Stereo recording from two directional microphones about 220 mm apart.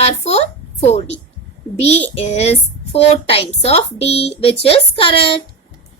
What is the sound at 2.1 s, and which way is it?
Speech, 30° left (ahead or behind).